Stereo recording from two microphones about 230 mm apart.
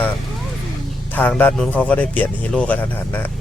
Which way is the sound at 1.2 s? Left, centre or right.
Centre.